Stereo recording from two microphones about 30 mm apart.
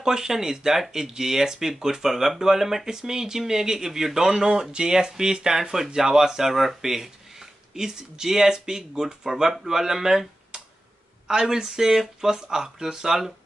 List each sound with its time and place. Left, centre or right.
0.0 s speech: centre